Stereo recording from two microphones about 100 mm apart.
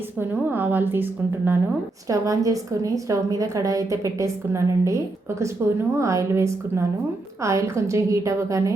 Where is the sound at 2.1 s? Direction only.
35° right (ahead or behind).